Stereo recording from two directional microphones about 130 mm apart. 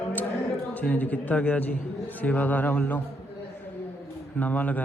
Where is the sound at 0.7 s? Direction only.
10° left (ahead or behind).